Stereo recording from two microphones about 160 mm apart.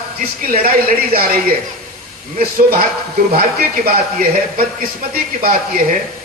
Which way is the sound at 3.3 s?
65° right (ahead or behind).